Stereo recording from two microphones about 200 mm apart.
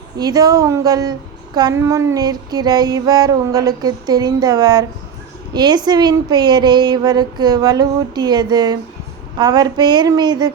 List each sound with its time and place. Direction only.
0.2 s a woman's voice: 20° right (ahead or behind)